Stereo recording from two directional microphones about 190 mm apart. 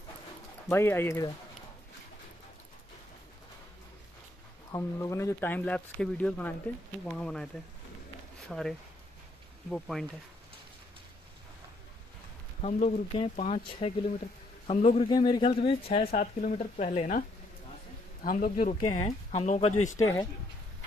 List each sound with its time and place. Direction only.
0.7 s speech: 15° left (ahead or behind)
4.7 s speech: 15° left (ahead or behind)
8.5 s speech: centre (ahead or behind)
12.6 s speech: 35° left (ahead or behind)
15.0 s speech: 25° left (ahead or behind)
16.2 s speech: 40° left (ahead or behind)
18.2 s speech: 50° left (ahead or behind)